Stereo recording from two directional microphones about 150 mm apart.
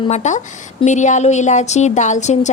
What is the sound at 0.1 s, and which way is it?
A woman's voice, 50° left (ahead or behind).